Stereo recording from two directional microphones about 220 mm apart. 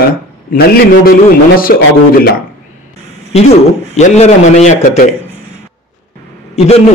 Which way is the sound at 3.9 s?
30° left (ahead or behind).